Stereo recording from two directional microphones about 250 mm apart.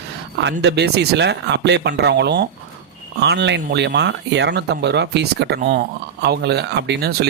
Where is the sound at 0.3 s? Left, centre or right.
Right.